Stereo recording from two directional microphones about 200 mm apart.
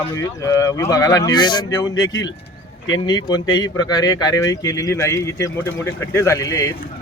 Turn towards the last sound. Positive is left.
turn(degrees=15)  # may be behind; listen again after turning